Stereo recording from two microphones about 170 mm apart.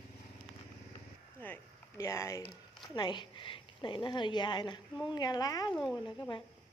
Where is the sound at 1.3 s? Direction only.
10° left (ahead or behind).